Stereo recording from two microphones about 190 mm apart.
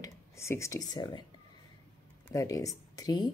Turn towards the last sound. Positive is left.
turn(degrees=20)  # may be behind; listen again after turning